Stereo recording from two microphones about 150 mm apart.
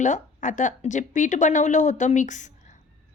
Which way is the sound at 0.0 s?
55° left (ahead or behind).